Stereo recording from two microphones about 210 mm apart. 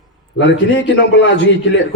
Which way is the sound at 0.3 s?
60° left (ahead or behind).